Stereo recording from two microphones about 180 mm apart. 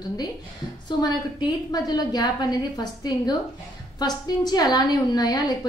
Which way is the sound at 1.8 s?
20° left (ahead or behind).